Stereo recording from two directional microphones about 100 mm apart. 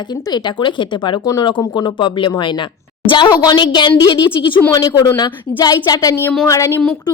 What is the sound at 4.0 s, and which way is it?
A woman's voice, 35° left (ahead or behind).